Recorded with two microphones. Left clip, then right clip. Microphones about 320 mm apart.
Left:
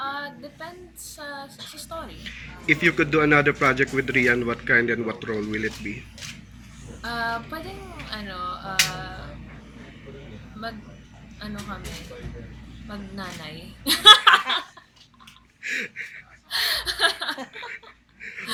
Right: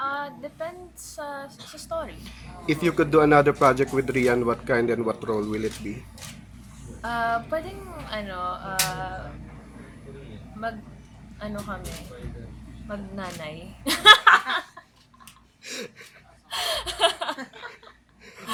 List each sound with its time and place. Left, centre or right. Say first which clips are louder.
0.0 s female singing: right 2 dB; centre
1.1 s a woman's voice: right 2 dB; centre
2.2 s speech: left 4 dB; centre
7.0 s a woman's voice: right 2 dB; centre
11.3 s a woman's voice: right 2 dB; centre
12.9 s a woman's voice: right 2 dB; centre
15.6 s a sound: left 8 dB; centre
16.5 s chuckle: left 3 dB; centre
18.2 s a sound: left 10 dB; centre